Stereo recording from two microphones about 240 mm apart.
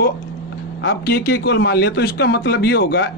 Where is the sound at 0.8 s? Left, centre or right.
Left.